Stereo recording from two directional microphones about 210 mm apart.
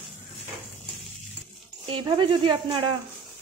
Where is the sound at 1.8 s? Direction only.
20° right (ahead or behind).